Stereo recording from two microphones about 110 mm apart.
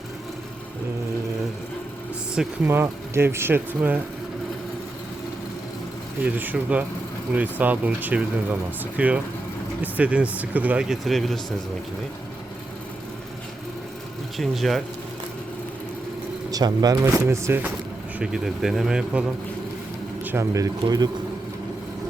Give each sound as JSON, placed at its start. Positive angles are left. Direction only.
{"t": 2.6, "sound": "speech", "side_deg": -20}
{"t": 6.2, "sound": "speech", "side_deg": -15}
{"t": 14.3, "sound": "speech", "side_deg": 0}
{"t": 16.5, "sound": "speech", "side_deg": -35}
{"t": 17.2, "sound": "speech", "side_deg": -25}
{"t": 18.2, "sound": "speech", "side_deg": -5}
{"t": 20.2, "sound": "speech", "side_deg": -25}